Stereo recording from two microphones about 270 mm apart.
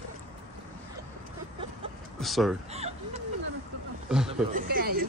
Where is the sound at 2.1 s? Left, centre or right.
Centre.